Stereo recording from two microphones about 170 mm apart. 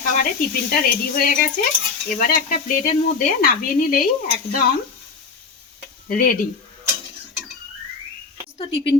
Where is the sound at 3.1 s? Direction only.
55° left (ahead or behind).